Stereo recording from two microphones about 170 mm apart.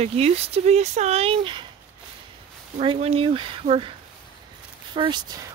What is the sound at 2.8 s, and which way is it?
Speech, 35° right (ahead or behind).